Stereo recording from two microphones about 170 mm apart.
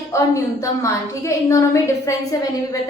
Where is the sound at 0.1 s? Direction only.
15° left (ahead or behind).